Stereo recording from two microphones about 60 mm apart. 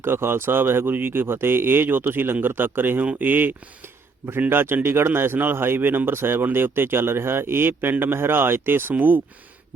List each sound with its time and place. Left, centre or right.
0.0 s a man's voice: right